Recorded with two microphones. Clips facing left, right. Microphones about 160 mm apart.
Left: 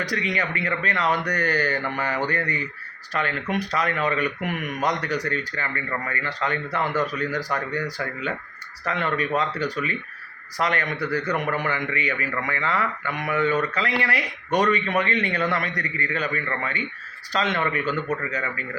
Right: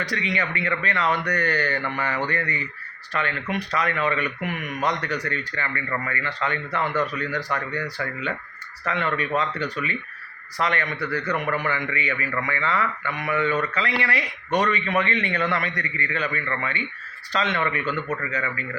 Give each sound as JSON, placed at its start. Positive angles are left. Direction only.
{"t": 0.0, "sound": "a man's voice", "side_deg": 45}